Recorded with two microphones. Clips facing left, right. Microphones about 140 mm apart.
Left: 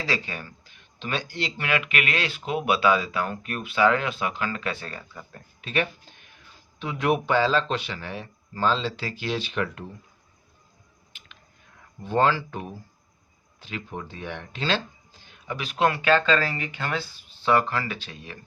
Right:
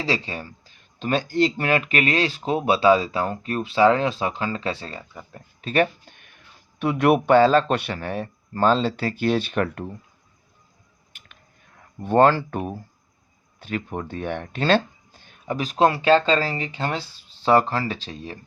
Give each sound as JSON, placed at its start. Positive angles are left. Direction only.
{"t": 0.0, "sound": "speech", "side_deg": -30}
{"t": 5.6, "sound": "a man's voice", "side_deg": -45}
{"t": 6.1, "sound": "a sound", "side_deg": -60}
{"t": 6.7, "sound": "a man's voice", "side_deg": -60}
{"t": 12.0, "sound": "a man's voice", "side_deg": -55}